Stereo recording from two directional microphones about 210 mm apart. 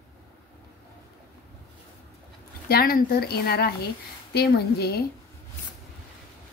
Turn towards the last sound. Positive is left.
turn(degrees=50)  # may be behind; listen again after turning